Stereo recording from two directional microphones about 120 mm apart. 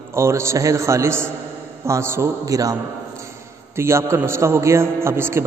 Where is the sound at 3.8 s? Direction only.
25° right (ahead or behind).